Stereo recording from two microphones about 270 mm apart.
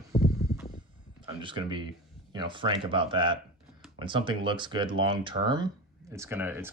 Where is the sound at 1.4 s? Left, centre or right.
Centre.